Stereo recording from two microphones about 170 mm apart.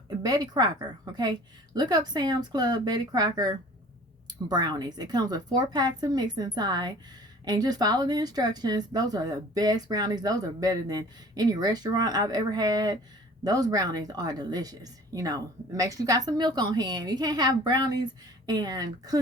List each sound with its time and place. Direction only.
0.2 s a woman's voice: 25° right (ahead or behind)